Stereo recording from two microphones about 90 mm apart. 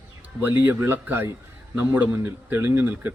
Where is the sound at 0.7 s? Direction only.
25° right (ahead or behind).